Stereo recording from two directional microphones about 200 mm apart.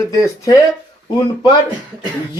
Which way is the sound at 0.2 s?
15° left (ahead or behind).